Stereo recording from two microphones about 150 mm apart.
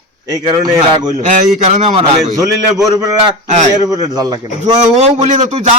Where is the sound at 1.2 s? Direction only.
50° right (ahead or behind).